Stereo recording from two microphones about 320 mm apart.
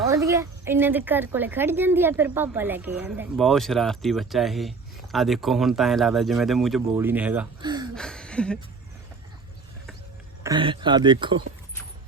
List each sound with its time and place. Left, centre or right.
0.0 s speech: centre
7.9 s speech: centre
10.4 s speech: centre